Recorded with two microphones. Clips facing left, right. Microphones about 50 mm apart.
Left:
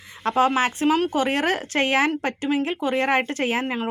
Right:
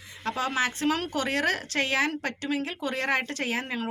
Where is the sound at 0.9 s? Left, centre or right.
Centre.